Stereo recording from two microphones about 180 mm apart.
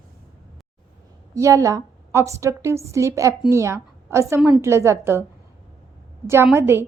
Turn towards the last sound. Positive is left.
turn(degrees=-15)  # may be behind; listen again after turning